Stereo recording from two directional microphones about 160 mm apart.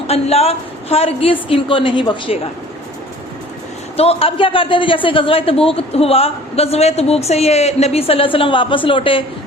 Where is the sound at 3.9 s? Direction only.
35° left (ahead or behind).